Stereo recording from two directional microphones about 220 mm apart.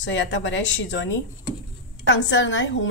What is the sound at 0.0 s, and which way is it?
A woman's voice, 55° left (ahead or behind).